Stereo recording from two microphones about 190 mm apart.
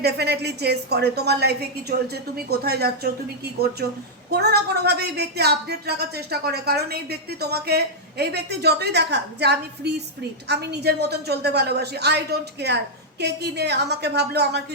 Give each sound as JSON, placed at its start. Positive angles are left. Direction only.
{"t": 0.0, "sound": "a woman's voice", "side_deg": -60}
{"t": 4.3, "sound": "a woman's voice", "side_deg": -60}